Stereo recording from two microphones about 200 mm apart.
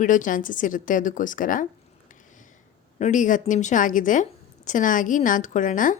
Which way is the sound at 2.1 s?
40° left (ahead or behind).